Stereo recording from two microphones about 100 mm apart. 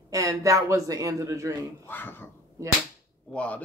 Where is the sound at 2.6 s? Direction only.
30° right (ahead or behind).